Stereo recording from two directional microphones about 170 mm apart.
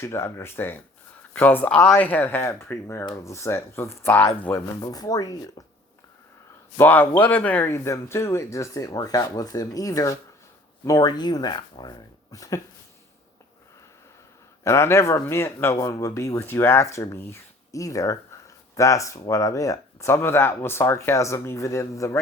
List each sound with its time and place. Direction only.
0.0 s speech: 15° left (ahead or behind)
6.7 s speech: 10° left (ahead or behind)
14.6 s speech: 15° left (ahead or behind)